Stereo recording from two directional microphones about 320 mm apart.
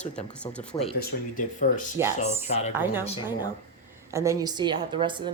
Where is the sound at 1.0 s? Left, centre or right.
Left.